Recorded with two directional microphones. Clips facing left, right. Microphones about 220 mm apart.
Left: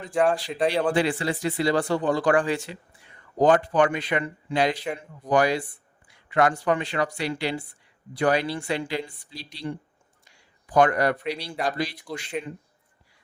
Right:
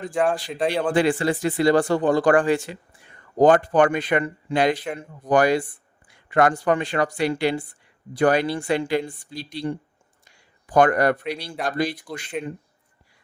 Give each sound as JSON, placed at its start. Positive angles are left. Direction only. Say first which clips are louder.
{"t": 0.1, "sound": "speech", "louder": "left 1 dB", "side_deg": 0}
{"t": 0.9, "sound": "speech", "louder": "right 4 dB", "side_deg": -50}
{"t": 4.8, "sound": "speech", "louder": "right 1 dB", "side_deg": 0}
{"t": 5.3, "sound": "speech", "louder": "right 3 dB", "side_deg": -50}
{"t": 10.2, "sound": "a sound", "louder": "right 2 dB", "side_deg": -50}
{"t": 11.2, "sound": "speech", "louder": "even", "side_deg": 0}